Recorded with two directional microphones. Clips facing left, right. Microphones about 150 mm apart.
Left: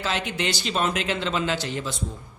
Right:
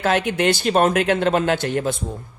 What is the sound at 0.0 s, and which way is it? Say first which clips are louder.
A man's voice: right 8 dB; 55° right (ahead or behind).